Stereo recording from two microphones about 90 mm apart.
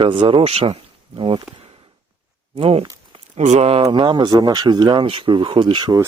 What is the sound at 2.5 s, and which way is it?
Speech, 90° right.